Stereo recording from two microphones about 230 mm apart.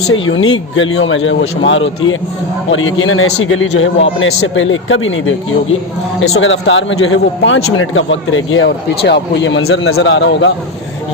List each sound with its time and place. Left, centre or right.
0.1 s a man's voice: left